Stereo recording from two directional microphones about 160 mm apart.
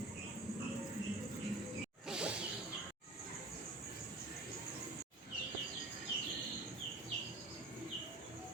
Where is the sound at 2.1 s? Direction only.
5° right (ahead or behind).